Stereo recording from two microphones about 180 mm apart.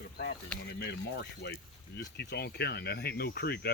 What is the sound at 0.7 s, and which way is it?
Speech, 70° left (ahead or behind).